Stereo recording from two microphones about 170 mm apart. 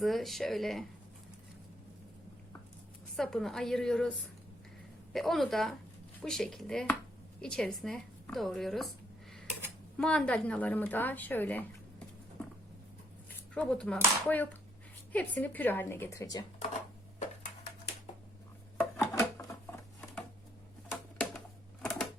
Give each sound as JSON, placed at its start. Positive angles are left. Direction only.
{"t": 0.0, "sound": "a woman's voice", "side_deg": 0}
{"t": 3.2, "sound": "a woman's voice", "side_deg": 5}
{"t": 5.1, "sound": "a woman's voice", "side_deg": 0}
{"t": 10.0, "sound": "speech", "side_deg": 5}
{"t": 13.5, "sound": "speech", "side_deg": 5}
{"t": 18.8, "sound": "a sound", "side_deg": 15}
{"t": 21.2, "sound": "typewriter", "side_deg": 5}